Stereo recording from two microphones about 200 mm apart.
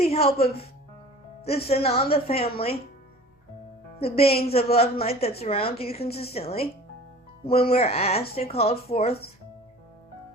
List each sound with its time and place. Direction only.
0.0 s a woman's voice: 30° left (ahead or behind)
4.0 s a woman's voice: 30° left (ahead or behind)